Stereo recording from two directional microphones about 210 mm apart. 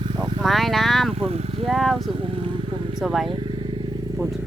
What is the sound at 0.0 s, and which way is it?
Vehicle, 25° right (ahead or behind).